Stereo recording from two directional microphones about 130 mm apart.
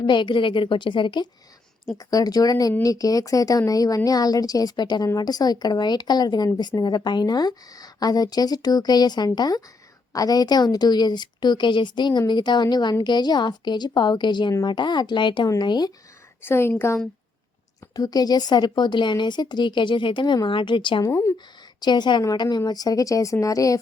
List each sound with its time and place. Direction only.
0.0 s a woman's voice: 35° left (ahead or behind)
16.4 s a woman's voice: 20° left (ahead or behind)
17.9 s a woman's voice: 30° left (ahead or behind)
21.0 s a woman's voice: 25° left (ahead or behind)
21.8 s a woman's voice: 35° left (ahead or behind)